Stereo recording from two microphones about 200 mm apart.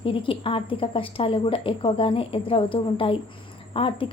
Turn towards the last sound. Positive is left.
turn(degrees=25)  # may be behind; listen again after turning